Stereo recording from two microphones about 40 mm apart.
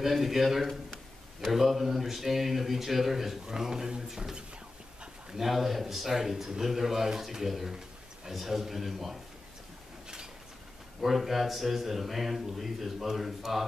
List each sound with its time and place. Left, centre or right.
0.0 s a man's voice: centre
5.4 s a man's voice: centre
11.0 s a man's voice: centre